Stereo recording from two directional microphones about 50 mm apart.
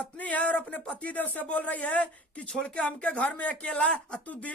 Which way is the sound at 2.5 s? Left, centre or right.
Centre.